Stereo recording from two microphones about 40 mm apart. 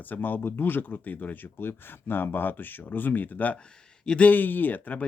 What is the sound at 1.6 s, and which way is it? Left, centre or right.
Speech, left.